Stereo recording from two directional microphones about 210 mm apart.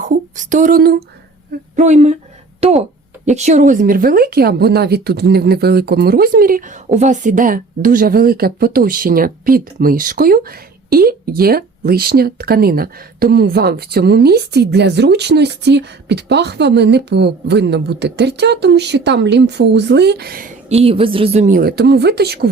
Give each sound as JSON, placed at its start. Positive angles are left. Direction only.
{"t": 0.0, "sound": "a sound", "side_deg": -35}
{"t": 1.7, "sound": "speech", "side_deg": -35}
{"t": 20.7, "sound": "speech", "side_deg": -30}